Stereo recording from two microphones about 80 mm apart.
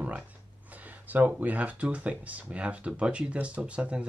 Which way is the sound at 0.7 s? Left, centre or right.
Right.